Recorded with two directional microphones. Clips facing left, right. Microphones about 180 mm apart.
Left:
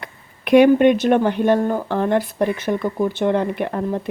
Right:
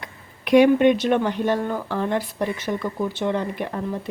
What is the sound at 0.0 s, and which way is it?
Speech, 55° left (ahead or behind).